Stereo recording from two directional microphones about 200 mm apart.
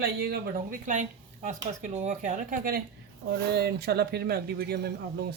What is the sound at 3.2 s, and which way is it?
Speech, 55° right (ahead or behind).